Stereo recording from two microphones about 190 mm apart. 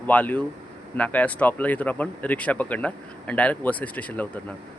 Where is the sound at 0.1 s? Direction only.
5° left (ahead or behind).